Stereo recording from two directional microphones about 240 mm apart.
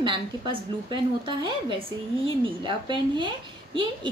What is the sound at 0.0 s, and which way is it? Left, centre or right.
A woman's voice, centre.